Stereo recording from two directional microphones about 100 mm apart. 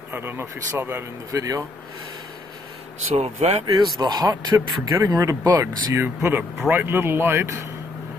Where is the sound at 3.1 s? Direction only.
90° right.